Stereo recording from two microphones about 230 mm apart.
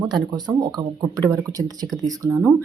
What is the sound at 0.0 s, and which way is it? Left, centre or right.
Speech, centre.